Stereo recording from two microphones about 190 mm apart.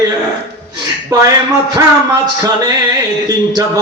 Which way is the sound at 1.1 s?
20° right (ahead or behind).